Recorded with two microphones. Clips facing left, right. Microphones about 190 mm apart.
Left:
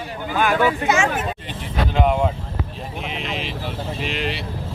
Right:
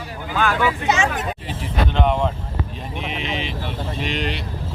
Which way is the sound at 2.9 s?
Centre (ahead or behind).